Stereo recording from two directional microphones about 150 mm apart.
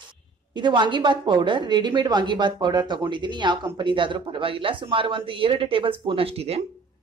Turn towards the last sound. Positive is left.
turn(degrees=-45)  # may be behind; listen again after turning